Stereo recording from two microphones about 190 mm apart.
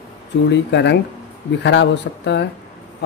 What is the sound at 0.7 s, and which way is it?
Speech, 65° left (ahead or behind).